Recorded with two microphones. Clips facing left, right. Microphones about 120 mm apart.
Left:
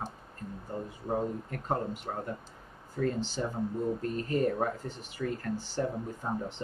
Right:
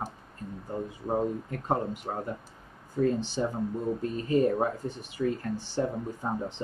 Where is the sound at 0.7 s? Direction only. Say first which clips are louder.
Right 3 dB; 20° right (ahead or behind).